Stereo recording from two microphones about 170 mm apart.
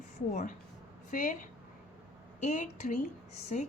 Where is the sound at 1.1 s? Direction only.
55° left (ahead or behind).